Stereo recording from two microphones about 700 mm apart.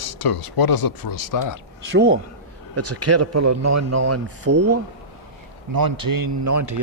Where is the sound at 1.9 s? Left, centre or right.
Centre.